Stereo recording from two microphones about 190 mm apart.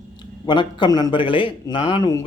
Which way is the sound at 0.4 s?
25° left (ahead or behind).